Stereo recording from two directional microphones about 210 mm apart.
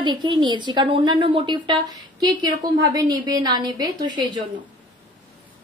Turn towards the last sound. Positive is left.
turn(degrees=-20)  # may be behind; listen again after turning